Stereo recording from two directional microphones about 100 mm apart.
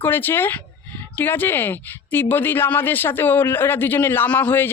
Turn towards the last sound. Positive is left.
turn(degrees=20)  # may be behind; listen again after turning